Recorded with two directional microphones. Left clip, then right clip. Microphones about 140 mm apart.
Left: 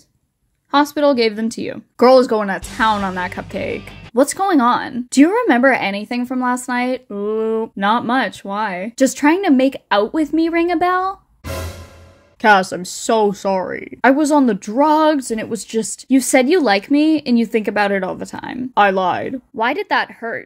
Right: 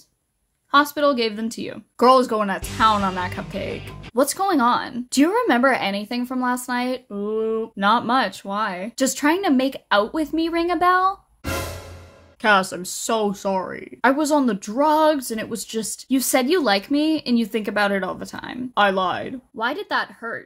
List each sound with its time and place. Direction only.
0.7 s speech: 30° left (ahead or behind)
1.1 s a woman's voice: 45° left (ahead or behind); by 3.3 s 25° left (ahead or behind)
3.3 s speech: 40° left (ahead or behind)
4.1 s a woman's voice: 30° left (ahead or behind)
7.2 s a sound: 70° left (ahead or behind)
7.7 s a woman's voice: 15° left (ahead or behind)
12.4 s speech: 35° left (ahead or behind)
14.0 s a woman's voice: 30° left (ahead or behind)
19.5 s a woman's voice: 20° left (ahead or behind)